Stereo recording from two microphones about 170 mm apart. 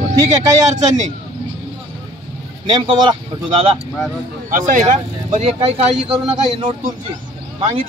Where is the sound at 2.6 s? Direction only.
25° right (ahead or behind).